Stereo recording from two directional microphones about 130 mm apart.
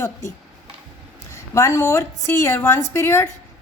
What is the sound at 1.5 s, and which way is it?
A woman's voice, 20° left (ahead or behind).